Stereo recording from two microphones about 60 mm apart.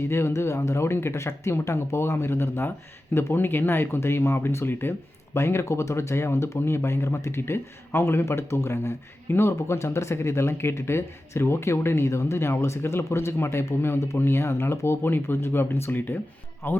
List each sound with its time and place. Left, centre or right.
0.0 s speech: left